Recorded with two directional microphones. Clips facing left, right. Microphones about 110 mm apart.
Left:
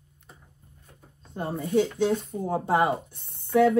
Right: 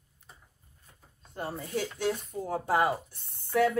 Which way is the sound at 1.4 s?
55° left (ahead or behind).